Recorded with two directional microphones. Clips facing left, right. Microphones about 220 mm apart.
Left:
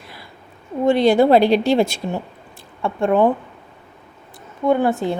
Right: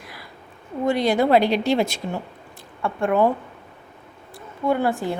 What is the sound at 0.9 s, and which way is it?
A woman's voice, 30° left (ahead or behind).